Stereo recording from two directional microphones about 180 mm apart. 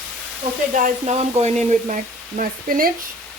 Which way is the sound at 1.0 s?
40° right (ahead or behind).